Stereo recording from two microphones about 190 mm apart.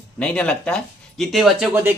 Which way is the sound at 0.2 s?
5° left (ahead or behind).